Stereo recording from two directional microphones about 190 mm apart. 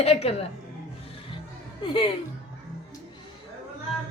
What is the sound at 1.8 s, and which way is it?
Speech, 25° left (ahead or behind).